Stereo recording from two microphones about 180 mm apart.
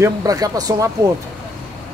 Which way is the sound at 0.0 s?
20° right (ahead or behind).